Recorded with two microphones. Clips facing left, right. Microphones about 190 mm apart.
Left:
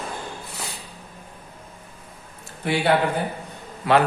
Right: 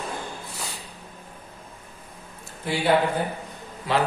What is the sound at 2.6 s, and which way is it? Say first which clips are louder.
Speech: left 4 dB; 65° left (ahead or behind).